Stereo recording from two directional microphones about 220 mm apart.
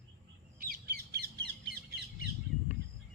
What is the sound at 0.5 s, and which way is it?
Squawk, 40° right (ahead or behind).